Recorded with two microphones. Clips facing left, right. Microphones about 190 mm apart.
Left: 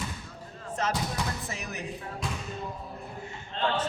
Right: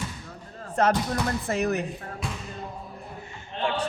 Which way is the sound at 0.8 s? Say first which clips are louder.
Right 7 dB; 60° right (ahead or behind).